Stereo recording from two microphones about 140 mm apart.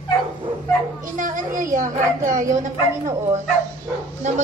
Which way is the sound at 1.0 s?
70° right (ahead or behind).